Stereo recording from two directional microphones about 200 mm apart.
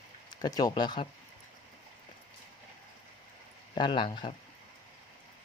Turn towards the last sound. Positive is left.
turn(degrees=25)  # may be behind; listen again after turning